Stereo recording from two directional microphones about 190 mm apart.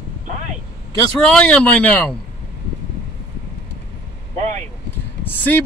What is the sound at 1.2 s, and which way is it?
Speech, 5° left (ahead or behind).